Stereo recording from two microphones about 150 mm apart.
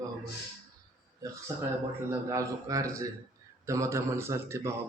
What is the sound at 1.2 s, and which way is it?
Speech, 25° right (ahead or behind).